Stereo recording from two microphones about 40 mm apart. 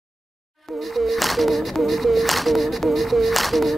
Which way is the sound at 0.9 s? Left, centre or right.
Centre.